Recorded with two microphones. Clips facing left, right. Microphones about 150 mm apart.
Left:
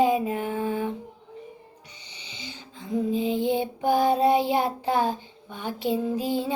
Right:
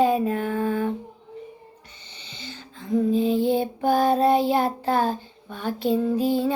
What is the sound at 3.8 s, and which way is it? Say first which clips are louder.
Child singing: right 1 dB; 15° left (ahead or behind).